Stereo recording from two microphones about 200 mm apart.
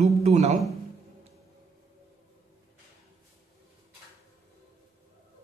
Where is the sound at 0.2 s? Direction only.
35° right (ahead or behind).